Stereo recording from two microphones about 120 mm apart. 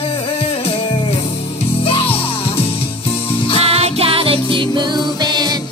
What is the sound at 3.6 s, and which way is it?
Music, 55° right (ahead or behind).